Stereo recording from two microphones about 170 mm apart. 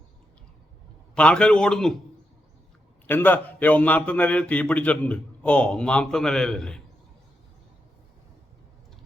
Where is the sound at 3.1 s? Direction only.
10° left (ahead or behind).